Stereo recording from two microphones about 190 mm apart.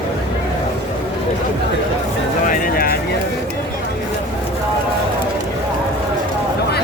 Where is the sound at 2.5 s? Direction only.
50° left (ahead or behind).